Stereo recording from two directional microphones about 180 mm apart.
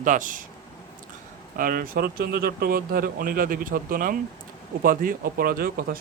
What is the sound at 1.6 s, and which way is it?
Speech, 55° right (ahead or behind).